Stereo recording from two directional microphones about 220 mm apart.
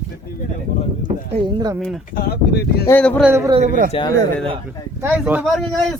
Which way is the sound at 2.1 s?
45° left (ahead or behind).